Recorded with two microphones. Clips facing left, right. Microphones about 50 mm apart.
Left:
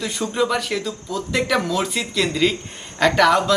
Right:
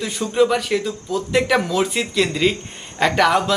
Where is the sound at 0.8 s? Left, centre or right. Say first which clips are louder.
Right 3 dB; centre.